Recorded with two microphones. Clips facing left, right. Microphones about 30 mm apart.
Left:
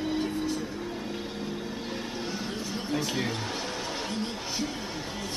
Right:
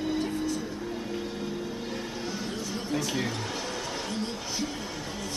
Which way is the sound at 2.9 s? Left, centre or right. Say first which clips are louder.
Even; centre.